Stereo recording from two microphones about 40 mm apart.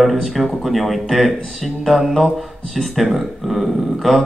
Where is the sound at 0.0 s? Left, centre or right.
Centre.